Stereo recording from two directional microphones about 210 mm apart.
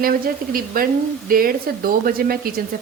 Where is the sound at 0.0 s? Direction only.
45° right (ahead or behind).